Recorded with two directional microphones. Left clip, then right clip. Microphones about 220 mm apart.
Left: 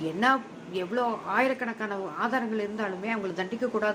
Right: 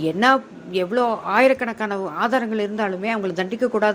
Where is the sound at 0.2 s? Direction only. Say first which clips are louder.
Right 7 dB; 40° right (ahead or behind).